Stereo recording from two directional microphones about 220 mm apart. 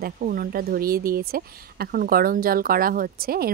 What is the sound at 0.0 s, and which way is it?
Speech, 40° right (ahead or behind).